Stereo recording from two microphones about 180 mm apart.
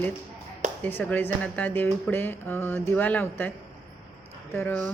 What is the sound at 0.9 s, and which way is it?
Speech, 10° left (ahead or behind).